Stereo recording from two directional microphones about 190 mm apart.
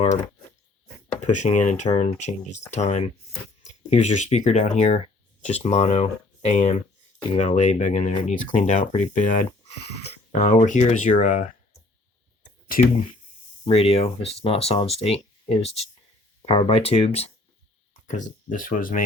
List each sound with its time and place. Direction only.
1.1 s speech: 40° left (ahead or behind)
12.6 s speech: 45° left (ahead or behind)
13.7 s speech: 30° left (ahead or behind)